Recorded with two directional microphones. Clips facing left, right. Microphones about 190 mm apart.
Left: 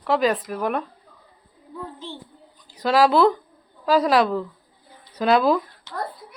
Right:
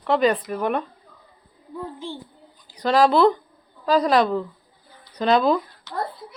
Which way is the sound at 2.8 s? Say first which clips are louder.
Even; 5° left (ahead or behind).